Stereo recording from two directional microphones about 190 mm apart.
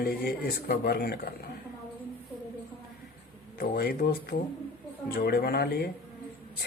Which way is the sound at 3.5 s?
55° left (ahead or behind).